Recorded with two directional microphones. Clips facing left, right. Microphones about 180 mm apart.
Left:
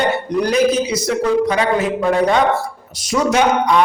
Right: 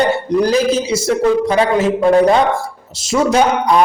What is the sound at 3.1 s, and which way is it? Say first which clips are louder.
Speech: right 2 dB; 30° right (ahead or behind).